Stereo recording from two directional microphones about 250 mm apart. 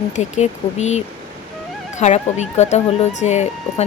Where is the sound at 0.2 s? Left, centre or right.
Left.